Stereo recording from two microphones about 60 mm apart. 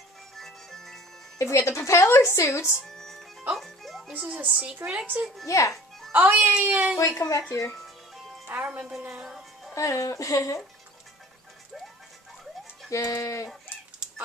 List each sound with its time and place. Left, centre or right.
0.4 s music: centre
1.4 s a woman's voice: left
2.9 s music: centre
4.1 s speech: right
5.7 s music: centre
6.1 s speech: right
7.0 s speech: left
8.6 s speech: right
9.2 s music: centre
9.8 s speech: left
12.9 s speech: left